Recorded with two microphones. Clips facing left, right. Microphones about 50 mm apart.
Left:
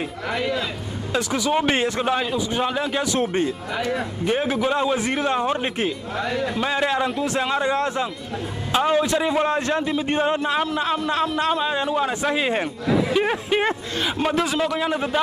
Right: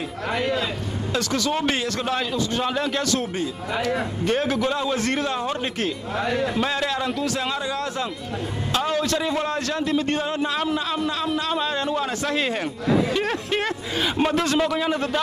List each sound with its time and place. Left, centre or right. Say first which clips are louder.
0.3 s a man's voice: right 1 dB; centre
1.1 s a man's voice: left 3 dB; centre
4.2 s a man's voice: left 1 dB; centre
6.1 s a man's voice: right 3 dB; centre
6.7 s speech: left 3 dB; left
8.7 s speech: left 4 dB; centre
9.8 s a man's voice: right 1 dB; centre
10.1 s a man's voice: left 3 dB; left
11.6 s a man's voice: left 2 dB; centre
14.2 s a man's voice: right 1 dB; centre